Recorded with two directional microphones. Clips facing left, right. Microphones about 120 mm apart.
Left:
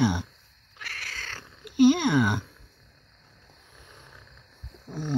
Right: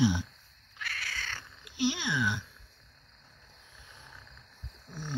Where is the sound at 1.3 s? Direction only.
45° left (ahead or behind).